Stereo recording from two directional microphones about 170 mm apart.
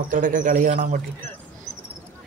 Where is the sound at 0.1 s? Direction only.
50° right (ahead or behind).